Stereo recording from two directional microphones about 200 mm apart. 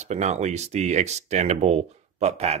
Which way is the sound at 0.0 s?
35° right (ahead or behind).